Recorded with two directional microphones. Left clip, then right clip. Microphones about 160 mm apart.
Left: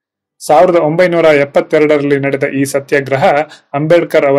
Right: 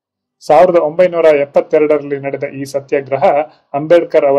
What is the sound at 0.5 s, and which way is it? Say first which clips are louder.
A man's voice: even; 30° left (ahead or behind).